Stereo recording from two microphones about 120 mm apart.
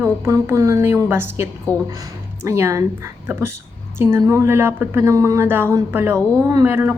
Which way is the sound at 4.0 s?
25° right (ahead or behind).